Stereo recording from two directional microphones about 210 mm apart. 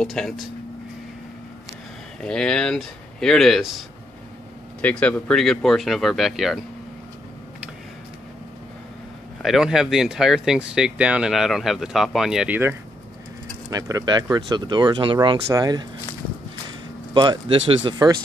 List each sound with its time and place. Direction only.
0.0 s speech: centre (ahead or behind)
2.2 s speech: 5° left (ahead or behind)
4.8 s speech: 5° left (ahead or behind)
9.4 s speech: centre (ahead or behind); by 15.9 s 20° right (ahead or behind)
17.1 s speech: 20° right (ahead or behind)